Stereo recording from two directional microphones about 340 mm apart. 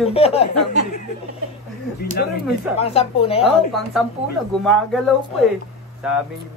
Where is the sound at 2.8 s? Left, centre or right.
Centre.